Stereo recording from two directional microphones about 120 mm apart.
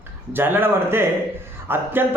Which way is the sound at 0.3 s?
15° right (ahead or behind).